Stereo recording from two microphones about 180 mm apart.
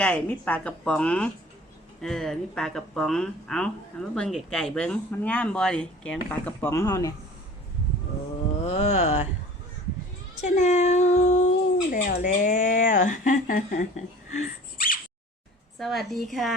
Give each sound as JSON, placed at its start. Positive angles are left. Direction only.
{"t": 0.0, "sound": "a woman's voice", "side_deg": 10}
{"t": 8.6, "sound": "a sound", "side_deg": 35}
{"t": 10.4, "sound": "speech", "side_deg": 40}
{"t": 11.9, "sound": "speech", "side_deg": 50}
{"t": 14.3, "sound": "a sound", "side_deg": 45}
{"t": 15.8, "sound": "speech", "side_deg": 0}